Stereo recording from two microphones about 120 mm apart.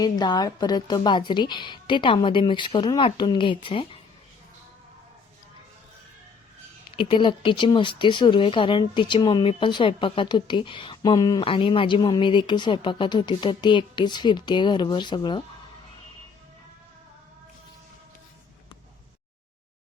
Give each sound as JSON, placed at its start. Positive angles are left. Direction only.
{"t": 0.0, "sound": "speech", "side_deg": 35}
{"t": 6.9, "sound": "speech", "side_deg": 45}
{"t": 11.4, "sound": "speech", "side_deg": 45}